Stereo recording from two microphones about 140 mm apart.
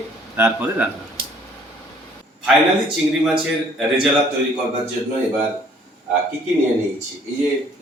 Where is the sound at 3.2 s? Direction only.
5° right (ahead or behind).